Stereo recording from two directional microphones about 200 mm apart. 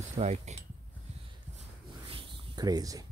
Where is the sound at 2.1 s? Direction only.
25° right (ahead or behind).